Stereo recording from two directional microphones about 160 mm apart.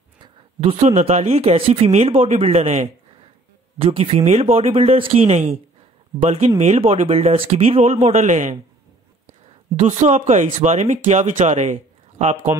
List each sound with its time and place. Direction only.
0.2 s speech: 35° right (ahead or behind)
9.8 s speech: 50° right (ahead or behind)